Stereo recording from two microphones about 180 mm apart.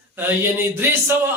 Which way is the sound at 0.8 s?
15° right (ahead or behind).